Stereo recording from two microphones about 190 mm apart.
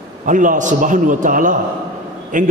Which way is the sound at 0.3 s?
45° right (ahead or behind).